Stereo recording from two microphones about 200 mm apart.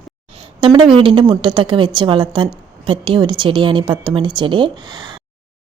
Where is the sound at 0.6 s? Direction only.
25° right (ahead or behind).